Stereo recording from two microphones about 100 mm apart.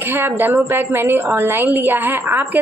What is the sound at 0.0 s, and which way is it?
Speech, 20° right (ahead or behind).